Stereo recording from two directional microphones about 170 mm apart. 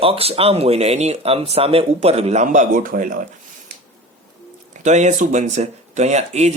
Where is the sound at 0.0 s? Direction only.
35° right (ahead or behind); by 3.2 s 55° right (ahead or behind).